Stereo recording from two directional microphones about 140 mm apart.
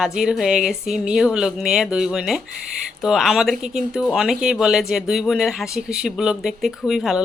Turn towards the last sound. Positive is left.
turn(degrees=0)  # may be behind; listen again after turning